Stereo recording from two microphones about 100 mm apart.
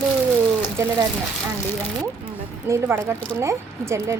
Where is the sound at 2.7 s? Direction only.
25° right (ahead or behind).